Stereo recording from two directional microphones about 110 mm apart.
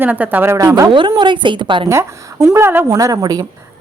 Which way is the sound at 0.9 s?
50° right (ahead or behind).